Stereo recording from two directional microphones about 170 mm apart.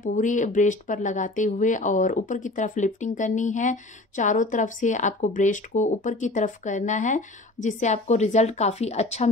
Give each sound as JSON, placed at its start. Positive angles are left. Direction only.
{"t": 0.0, "sound": "speech", "side_deg": 50}